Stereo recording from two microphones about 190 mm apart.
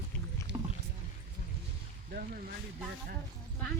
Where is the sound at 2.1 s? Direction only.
50° right (ahead or behind).